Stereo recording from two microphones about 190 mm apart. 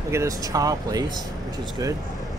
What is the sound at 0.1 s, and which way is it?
Speech, 15° right (ahead or behind).